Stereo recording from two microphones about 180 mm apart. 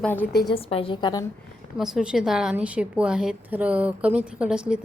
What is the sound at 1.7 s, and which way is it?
A woman's voice, centre (ahead or behind).